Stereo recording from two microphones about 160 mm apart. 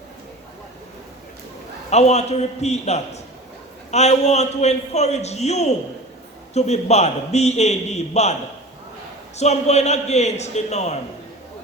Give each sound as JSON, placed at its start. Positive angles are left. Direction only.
{"t": 1.9, "sound": "a man's voice", "side_deg": 45}
{"t": 9.4, "sound": "a man's voice", "side_deg": 45}